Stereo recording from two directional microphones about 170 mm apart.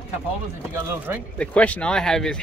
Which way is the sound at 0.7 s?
15° right (ahead or behind).